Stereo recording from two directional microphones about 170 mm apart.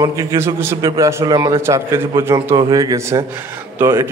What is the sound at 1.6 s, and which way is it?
A man's voice, 15° right (ahead or behind).